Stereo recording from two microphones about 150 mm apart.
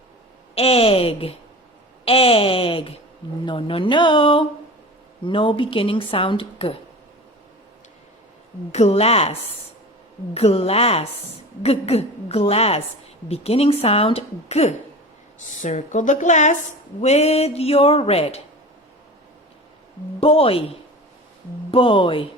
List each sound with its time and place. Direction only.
0.5 s a woman's voice: 40° left (ahead or behind)
8.7 s speech: 45° left (ahead or behind)
10.3 s a woman's voice: 40° left (ahead or behind)
20.1 s a woman's voice: 40° left (ahead or behind)
21.7 s a woman's voice: 35° left (ahead or behind)